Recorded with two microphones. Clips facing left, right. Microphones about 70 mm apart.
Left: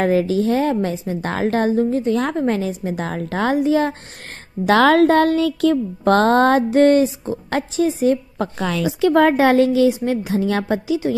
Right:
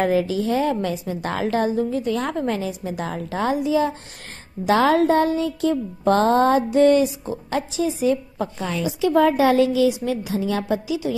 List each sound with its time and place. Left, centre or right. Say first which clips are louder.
0.0 s a woman's voice: left 3 dB; left
0.9 s a woman's voice: left 2 dB; left
2.1 s a woman's voice: left 4 dB; left
4.6 s a sound: left 4 dB; left
7.4 s a woman's voice: left 4 dB; left
8.5 s a woman's voice: left 5 dB; left
9.0 s a woman's voice: left 3 dB; left